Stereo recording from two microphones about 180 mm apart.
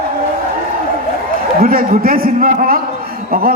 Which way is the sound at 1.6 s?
55° right (ahead or behind).